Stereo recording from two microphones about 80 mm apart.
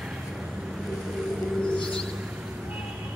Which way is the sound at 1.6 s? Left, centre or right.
Centre.